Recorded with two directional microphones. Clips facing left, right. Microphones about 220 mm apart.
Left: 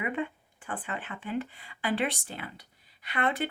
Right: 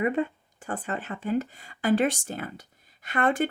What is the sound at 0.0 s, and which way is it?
Speech, 40° right (ahead or behind).